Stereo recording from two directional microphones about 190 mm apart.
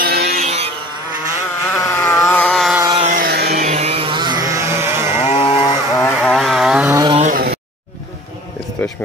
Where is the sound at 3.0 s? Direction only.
50° right (ahead or behind).